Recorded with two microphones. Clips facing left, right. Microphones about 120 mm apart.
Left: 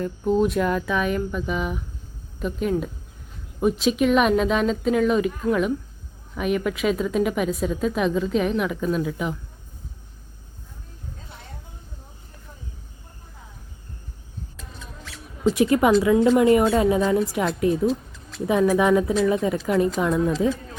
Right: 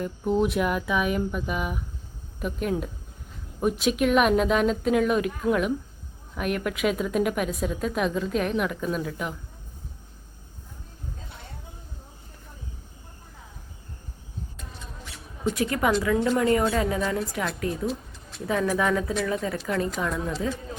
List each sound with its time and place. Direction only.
0.0 s a woman's voice: 15° right (ahead or behind); by 9.3 s centre (ahead or behind)
15.4 s a woman's voice: 25° left (ahead or behind)